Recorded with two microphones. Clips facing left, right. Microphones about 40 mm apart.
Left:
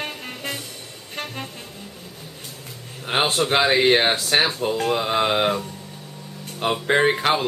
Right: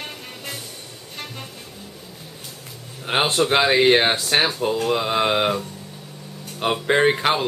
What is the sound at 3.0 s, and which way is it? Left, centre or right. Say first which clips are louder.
A man's voice: right 1 dB; centre.